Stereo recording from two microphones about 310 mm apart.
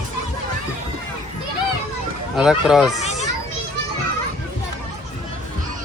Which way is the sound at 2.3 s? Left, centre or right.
Centre.